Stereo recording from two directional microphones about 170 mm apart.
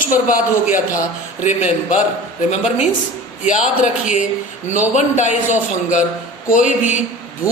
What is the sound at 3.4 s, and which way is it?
A man's voice, 45° left (ahead or behind).